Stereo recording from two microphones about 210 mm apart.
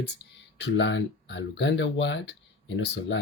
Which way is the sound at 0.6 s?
60° left (ahead or behind).